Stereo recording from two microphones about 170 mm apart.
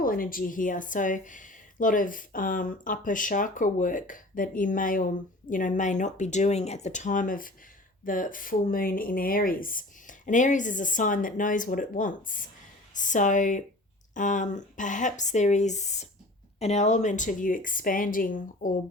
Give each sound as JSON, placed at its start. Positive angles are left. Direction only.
{"t": 0.0, "sound": "speech", "side_deg": 55}